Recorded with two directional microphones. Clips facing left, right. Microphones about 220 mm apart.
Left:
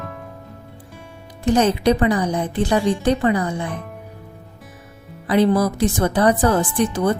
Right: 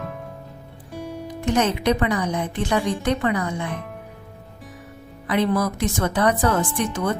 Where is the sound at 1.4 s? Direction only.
35° left (ahead or behind).